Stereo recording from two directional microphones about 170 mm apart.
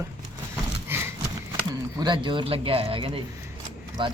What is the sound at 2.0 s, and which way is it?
Speech, 25° right (ahead or behind).